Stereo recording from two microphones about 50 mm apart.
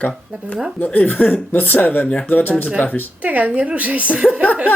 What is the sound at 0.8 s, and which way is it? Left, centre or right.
Speech, left.